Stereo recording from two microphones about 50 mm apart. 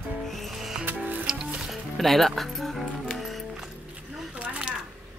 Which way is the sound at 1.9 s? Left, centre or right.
Centre.